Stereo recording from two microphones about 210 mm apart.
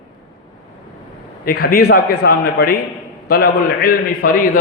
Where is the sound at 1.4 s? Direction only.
45° left (ahead or behind).